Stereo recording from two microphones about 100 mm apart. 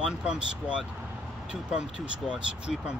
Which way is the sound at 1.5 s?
10° right (ahead or behind).